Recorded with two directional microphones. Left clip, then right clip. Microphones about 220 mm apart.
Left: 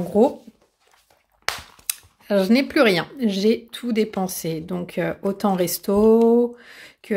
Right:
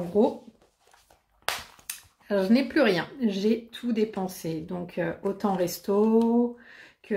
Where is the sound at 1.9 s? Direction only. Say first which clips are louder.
Left 7 dB; 40° left (ahead or behind).